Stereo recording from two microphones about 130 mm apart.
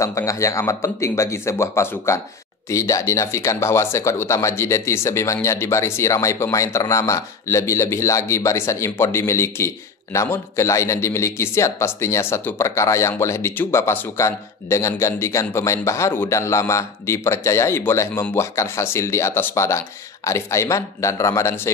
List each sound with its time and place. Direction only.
0.0 s speech: 25° left (ahead or behind)